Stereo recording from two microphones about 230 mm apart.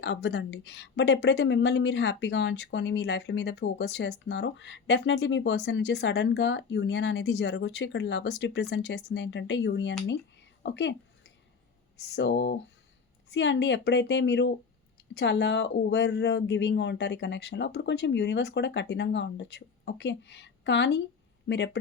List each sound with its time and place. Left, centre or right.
0.0 s a woman's voice: left
11.9 s a woman's voice: left